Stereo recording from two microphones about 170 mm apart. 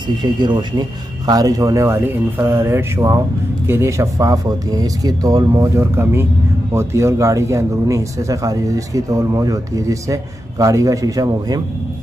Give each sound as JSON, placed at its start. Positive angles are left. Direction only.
{"t": 0.2, "sound": "speech", "side_deg": -25}